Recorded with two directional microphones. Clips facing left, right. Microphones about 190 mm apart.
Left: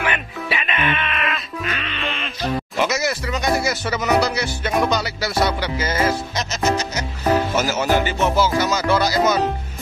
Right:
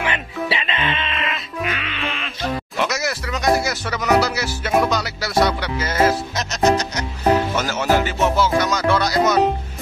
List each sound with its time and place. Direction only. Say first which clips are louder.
0.0 s music: right 1 dB; 25° right (ahead or behind)
1.8 s music: even; 5° right (ahead or behind)
2.8 s speech: left 2 dB; centre (ahead or behind)